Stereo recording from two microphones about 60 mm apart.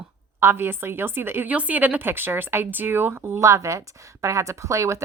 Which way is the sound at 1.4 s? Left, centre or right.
Right.